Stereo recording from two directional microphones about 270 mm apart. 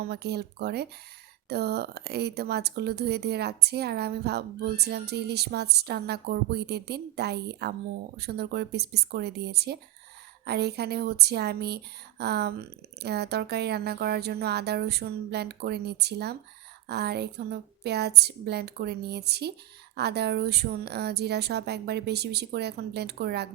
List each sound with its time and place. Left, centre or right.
0.0 s speech: right